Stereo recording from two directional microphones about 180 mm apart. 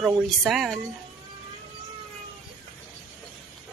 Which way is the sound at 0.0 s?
Centre (ahead or behind).